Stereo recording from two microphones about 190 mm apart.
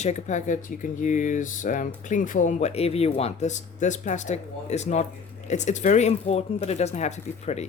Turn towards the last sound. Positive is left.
turn(degrees=35)  # may be behind; listen again after turning